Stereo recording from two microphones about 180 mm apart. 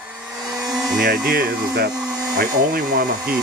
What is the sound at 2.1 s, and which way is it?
Dental drill, 20° right (ahead or behind).